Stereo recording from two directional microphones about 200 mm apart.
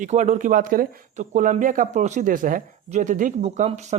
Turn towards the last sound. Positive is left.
turn(degrees=-35)  # may be behind; listen again after turning